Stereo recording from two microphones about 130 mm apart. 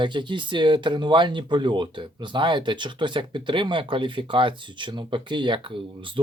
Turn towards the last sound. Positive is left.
turn(degrees=-40)  # may be behind; listen again after turning